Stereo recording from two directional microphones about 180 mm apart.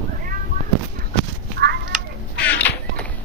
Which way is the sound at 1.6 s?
90° right.